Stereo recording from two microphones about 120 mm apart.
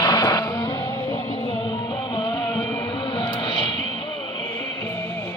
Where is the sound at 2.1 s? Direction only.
45° left (ahead or behind).